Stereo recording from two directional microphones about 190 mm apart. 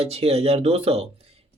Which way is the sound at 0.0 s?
30° right (ahead or behind).